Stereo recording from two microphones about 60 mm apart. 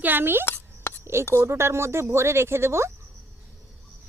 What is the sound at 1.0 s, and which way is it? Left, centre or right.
Speech, right.